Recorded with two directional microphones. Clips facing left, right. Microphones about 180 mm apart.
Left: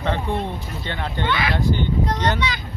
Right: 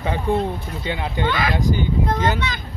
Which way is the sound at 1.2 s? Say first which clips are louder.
Right 1 dB; 45° right (ahead or behind).